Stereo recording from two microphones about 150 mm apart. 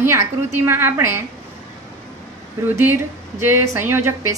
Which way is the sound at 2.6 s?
20° right (ahead or behind).